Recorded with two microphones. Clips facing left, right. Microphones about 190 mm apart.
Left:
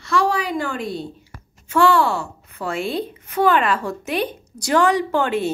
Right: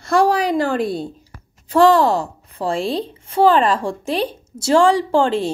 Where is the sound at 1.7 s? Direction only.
35° right (ahead or behind).